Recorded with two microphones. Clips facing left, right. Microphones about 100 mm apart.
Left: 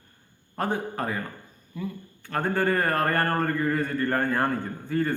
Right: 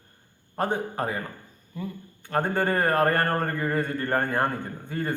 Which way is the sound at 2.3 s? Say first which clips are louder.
Even; 20° right (ahead or behind).